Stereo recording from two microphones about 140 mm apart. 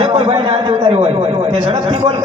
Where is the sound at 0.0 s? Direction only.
40° right (ahead or behind).